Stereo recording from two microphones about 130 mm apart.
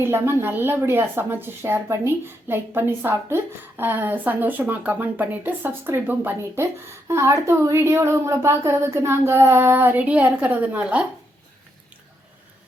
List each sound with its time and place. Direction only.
0.0 s a woman's voice: 20° right (ahead or behind)